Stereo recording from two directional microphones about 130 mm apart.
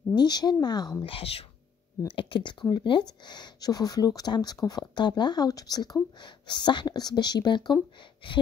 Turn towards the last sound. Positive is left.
turn(degrees=35)  # may be behind; listen again after turning